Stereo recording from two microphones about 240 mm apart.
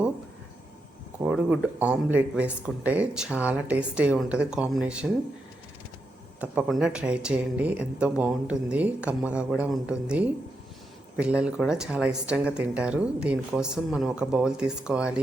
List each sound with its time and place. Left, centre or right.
1.2 s speech: centre
6.4 s speech: centre